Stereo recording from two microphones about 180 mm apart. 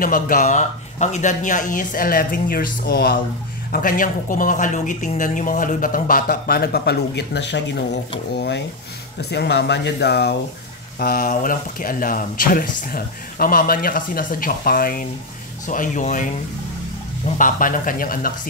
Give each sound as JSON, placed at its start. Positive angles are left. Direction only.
{"t": 0.0, "sound": "speech", "side_deg": 50}
{"t": 3.7, "sound": "speech", "side_deg": 50}
{"t": 11.0, "sound": "speech", "side_deg": 55}
{"t": 17.4, "sound": "speech", "side_deg": 50}